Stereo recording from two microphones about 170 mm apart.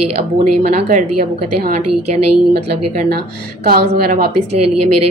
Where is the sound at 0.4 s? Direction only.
50° right (ahead or behind).